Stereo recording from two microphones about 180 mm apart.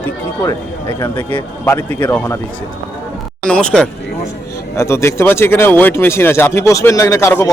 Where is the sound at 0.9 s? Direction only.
10° left (ahead or behind).